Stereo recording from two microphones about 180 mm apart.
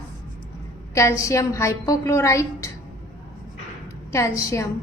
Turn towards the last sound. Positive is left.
turn(degrees=15)  # may be behind; listen again after turning